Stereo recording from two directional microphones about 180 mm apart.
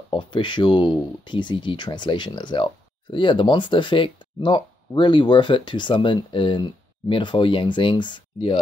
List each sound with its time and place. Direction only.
0.1 s speech: 25° left (ahead or behind)